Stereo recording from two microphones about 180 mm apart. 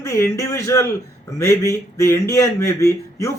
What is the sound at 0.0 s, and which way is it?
A man's voice, 15° left (ahead or behind).